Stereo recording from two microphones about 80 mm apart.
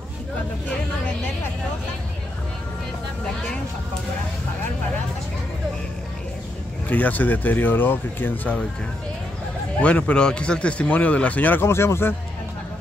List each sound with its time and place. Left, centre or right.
6.9 s speech: centre
9.8 s a man's voice: centre
11.6 s speech: left